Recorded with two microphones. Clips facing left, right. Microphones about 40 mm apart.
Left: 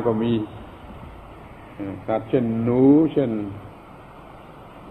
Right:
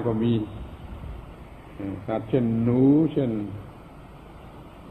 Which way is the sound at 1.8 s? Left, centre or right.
Centre.